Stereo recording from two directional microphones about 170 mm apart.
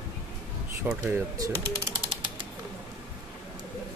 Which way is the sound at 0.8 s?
10° right (ahead or behind).